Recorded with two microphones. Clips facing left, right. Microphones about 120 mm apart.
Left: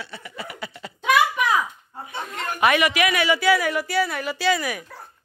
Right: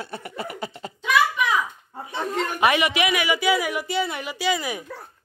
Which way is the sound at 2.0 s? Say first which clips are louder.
Right 5 dB; 35° right (ahead or behind).